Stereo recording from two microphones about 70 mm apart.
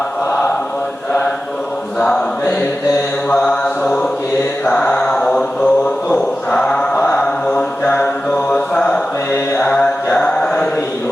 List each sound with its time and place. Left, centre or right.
2.0 s mantra: centre
3.2 s mantra: centre